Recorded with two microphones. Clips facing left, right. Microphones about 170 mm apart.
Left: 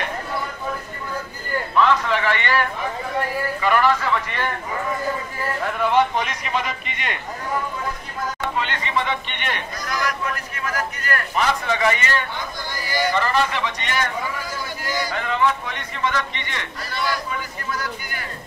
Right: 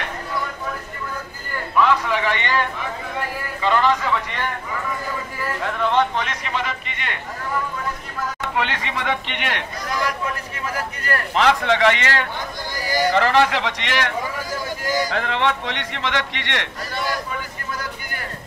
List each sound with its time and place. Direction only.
2.0 s a man's voice: 15° right (ahead or behind)
3.6 s speech: 20° right (ahead or behind)
5.8 s speech: 10° left (ahead or behind)
8.5 s a man's voice: 80° right
9.8 s speech: 30° right (ahead or behind)
11.3 s a man's voice: 85° right
12.8 s a sound: 40° right (ahead or behind)
13.1 s a man's voice: 85° right
16.9 s a sound: 45° right (ahead or behind)